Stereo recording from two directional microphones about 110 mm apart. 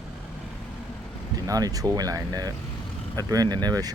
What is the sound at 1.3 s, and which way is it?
Speech, 35° right (ahead or behind).